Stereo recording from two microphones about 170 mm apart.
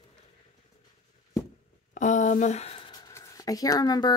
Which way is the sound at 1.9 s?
45° left (ahead or behind).